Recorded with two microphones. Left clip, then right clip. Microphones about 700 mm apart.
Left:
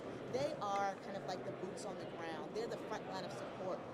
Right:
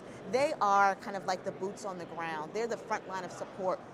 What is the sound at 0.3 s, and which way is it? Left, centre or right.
Speech, right.